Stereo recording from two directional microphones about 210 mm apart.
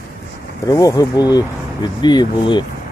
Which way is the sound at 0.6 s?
15° left (ahead or behind).